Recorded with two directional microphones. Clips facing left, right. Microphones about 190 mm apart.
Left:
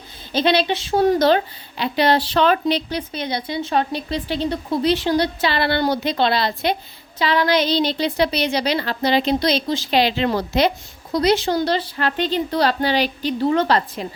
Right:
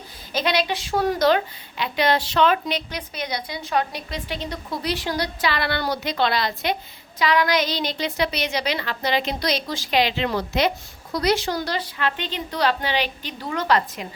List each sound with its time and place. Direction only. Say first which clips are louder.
0.3 s a woman's voice: left 5 dB; 30° left (ahead or behind)